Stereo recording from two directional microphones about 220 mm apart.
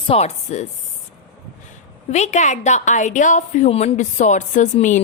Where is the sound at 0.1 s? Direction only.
30° left (ahead or behind).